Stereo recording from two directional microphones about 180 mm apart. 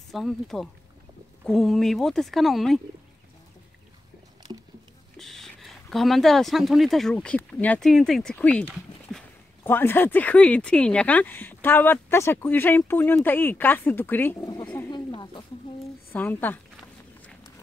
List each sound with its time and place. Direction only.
0.1 s speech: centre (ahead or behind)
5.1 s speech: centre (ahead or behind)
8.6 s dog: centre (ahead or behind)
9.6 s speech: 10° left (ahead or behind)
14.9 s snake: 25° left (ahead or behind)
16.1 s speech: 10° left (ahead or behind)